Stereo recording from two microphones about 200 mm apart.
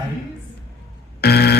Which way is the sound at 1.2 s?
55° left (ahead or behind).